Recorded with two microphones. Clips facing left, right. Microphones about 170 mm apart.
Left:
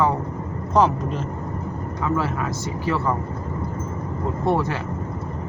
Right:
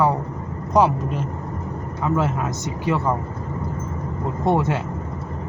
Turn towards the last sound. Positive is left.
turn(degrees=-20)  # may be behind; listen again after turning